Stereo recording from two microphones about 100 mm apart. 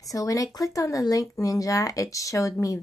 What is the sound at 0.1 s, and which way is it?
A woman's voice, 35° left (ahead or behind).